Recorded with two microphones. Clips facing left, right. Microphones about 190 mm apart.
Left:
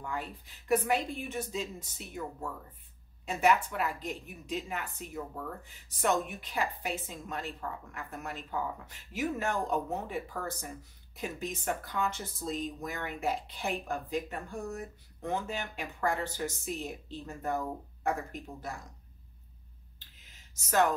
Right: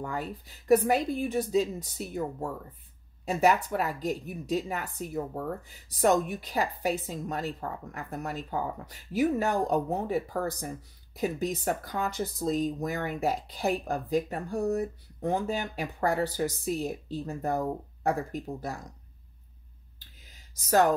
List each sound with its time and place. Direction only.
0.0 s a woman's voice: 40° right (ahead or behind)
20.5 s a woman's voice: 35° right (ahead or behind)